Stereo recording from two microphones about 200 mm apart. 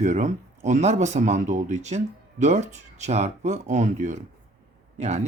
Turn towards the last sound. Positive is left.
turn(degrees=-35)  # may be behind; listen again after turning